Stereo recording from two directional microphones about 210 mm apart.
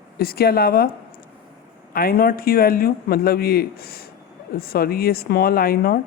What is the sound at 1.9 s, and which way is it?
A man's voice, 45° left (ahead or behind).